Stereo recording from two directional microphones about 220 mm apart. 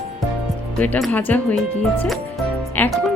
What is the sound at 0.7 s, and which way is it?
Speech, 5° left (ahead or behind).